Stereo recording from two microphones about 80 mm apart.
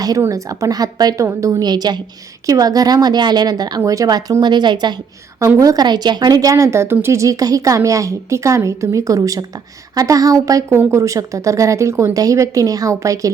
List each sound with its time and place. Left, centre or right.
0.3 s a woman's voice: right
1.6 s a woman's voice: right
2.5 s a woman's voice: right
5.5 s a woman's voice: right
5.8 s a woman's voice: right
10.7 s a woman's voice: right